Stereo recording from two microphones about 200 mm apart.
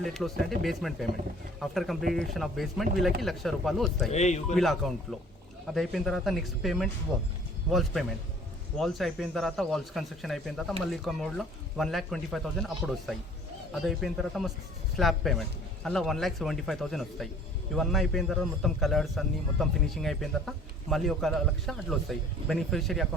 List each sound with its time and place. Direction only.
0.0 s a man's voice: centre (ahead or behind)
4.1 s speech: 35° left (ahead or behind)
4.5 s a man's voice: centre (ahead or behind)